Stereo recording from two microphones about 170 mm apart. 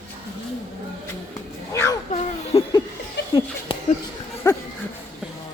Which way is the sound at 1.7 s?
15° left (ahead or behind).